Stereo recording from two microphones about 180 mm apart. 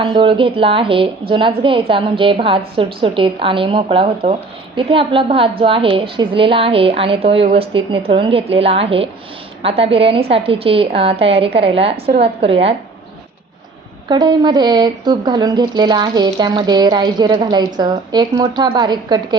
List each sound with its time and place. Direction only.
0.0 s a woman's voice: 25° right (ahead or behind)
14.1 s a woman's voice: 25° right (ahead or behind)